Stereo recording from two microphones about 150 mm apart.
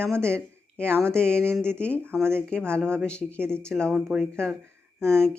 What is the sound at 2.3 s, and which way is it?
Speech, 5° left (ahead or behind).